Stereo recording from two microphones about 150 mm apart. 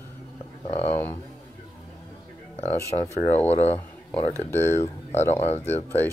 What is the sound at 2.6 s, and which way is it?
Speech, 15° left (ahead or behind).